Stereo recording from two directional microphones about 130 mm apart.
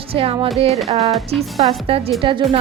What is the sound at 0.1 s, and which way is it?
Speech, 45° right (ahead or behind).